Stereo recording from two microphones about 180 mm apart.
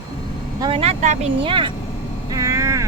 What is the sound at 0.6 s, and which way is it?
Speech, 30° right (ahead or behind).